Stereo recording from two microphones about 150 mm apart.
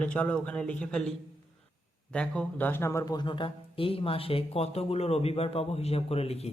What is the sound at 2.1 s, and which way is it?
Speech, 5° left (ahead or behind).